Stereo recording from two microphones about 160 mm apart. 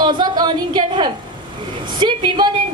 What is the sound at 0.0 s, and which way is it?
A woman's voice, 25° right (ahead or behind).